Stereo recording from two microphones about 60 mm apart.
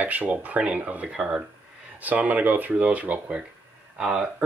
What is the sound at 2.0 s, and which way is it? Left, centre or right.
Speech, right.